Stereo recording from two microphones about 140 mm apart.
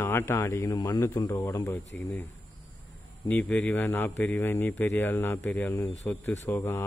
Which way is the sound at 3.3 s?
10° left (ahead or behind).